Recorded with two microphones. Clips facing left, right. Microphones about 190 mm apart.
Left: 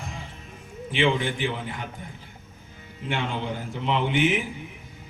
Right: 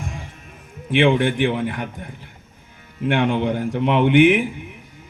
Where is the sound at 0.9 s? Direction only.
60° right (ahead or behind).